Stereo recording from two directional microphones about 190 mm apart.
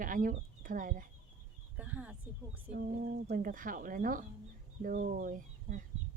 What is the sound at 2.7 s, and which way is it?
A woman's voice, 55° right (ahead or behind).